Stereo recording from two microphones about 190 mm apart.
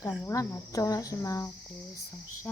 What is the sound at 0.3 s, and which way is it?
Speech, 15° left (ahead or behind).